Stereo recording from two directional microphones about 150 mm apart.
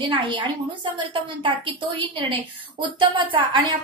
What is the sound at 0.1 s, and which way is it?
A woman's voice, 35° right (ahead or behind).